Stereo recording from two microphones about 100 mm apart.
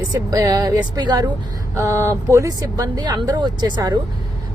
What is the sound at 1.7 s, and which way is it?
Speech, 30° right (ahead or behind).